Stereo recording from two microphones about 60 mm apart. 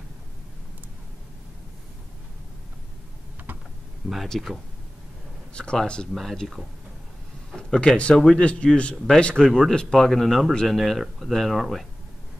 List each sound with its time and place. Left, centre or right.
4.3 s speech: centre
5.5 s speech: centre
6.1 s speech: centre
8.9 s speech: centre